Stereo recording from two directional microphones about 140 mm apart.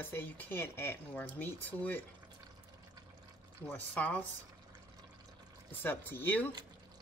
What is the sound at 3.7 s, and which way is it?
Speech, 10° left (ahead or behind).